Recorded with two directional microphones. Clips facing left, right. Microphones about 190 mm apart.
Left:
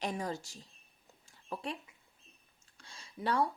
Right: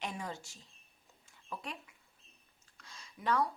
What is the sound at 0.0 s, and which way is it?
Speech, 35° left (ahead or behind).